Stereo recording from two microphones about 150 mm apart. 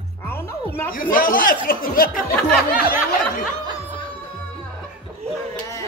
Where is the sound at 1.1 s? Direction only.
70° left (ahead or behind).